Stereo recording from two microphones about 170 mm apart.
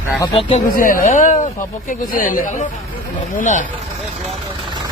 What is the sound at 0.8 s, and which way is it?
Speech, 55° left (ahead or behind).